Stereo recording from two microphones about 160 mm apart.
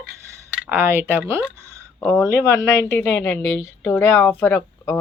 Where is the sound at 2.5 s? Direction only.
15° left (ahead or behind).